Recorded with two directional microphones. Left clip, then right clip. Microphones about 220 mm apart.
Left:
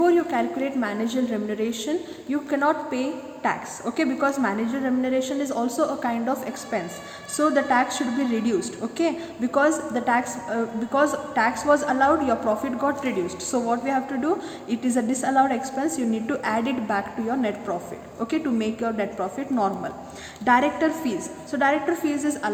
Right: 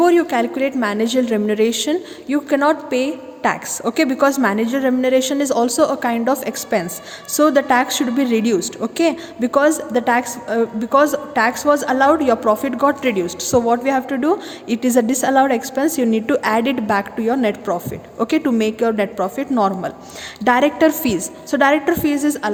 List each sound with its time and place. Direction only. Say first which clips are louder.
0.0 s a woman's voice: right 6 dB; 45° right (ahead or behind)